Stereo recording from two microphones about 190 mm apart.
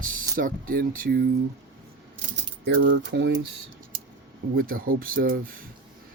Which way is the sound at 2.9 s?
70° right (ahead or behind).